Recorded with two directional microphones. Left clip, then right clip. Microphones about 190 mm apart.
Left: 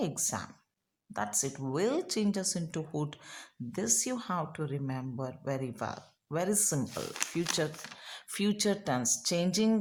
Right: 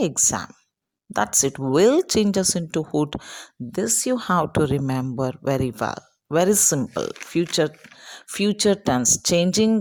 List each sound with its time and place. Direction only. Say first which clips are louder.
0.0 s speech: right 12 dB; 35° right (ahead or behind)